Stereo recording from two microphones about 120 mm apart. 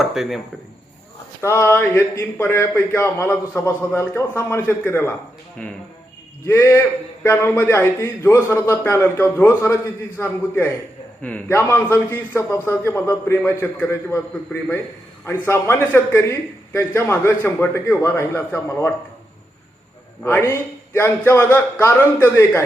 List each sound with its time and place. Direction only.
0.0 s speech: centre (ahead or behind)
1.4 s a man's voice: 20° left (ahead or behind)
5.6 s a man's voice: 10° left (ahead or behind)
6.4 s a man's voice: 20° left (ahead or behind)
20.2 s a man's voice: 20° left (ahead or behind)